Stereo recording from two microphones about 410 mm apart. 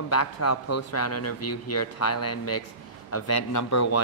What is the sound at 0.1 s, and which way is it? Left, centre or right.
Speech, left.